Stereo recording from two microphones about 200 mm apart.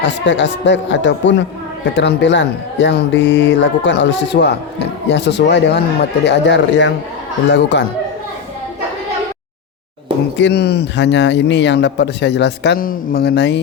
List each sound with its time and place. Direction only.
0.0 s speech: 65° left (ahead or behind)
10.3 s speech: 60° left (ahead or behind)